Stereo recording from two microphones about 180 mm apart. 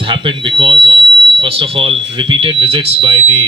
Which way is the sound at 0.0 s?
30° right (ahead or behind).